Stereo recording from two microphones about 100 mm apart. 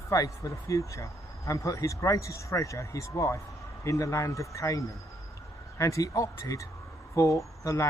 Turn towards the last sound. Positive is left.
turn(degrees=30)  # may be behind; listen again after turning